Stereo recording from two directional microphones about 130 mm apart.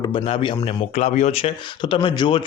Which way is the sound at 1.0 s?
60° left (ahead or behind).